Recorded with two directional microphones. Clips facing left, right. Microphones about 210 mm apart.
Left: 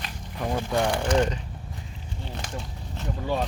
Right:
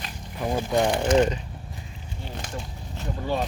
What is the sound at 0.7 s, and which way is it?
Speech, 15° right (ahead or behind).